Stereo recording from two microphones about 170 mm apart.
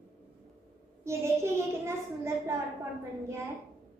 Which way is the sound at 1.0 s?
15° right (ahead or behind).